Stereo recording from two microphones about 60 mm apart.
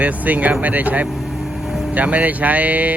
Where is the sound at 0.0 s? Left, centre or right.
Right.